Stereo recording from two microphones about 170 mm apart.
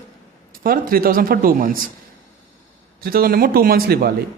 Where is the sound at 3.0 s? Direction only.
60° right (ahead or behind).